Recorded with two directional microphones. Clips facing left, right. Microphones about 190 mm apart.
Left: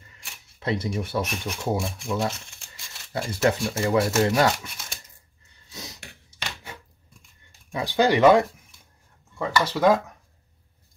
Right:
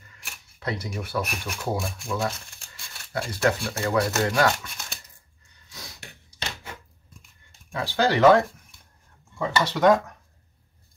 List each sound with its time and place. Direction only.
0.1 s speech: 25° left (ahead or behind)
5.7 s a sound: 25° left (ahead or behind)
7.7 s speech: 15° left (ahead or behind)
9.4 s speech: 5° left (ahead or behind)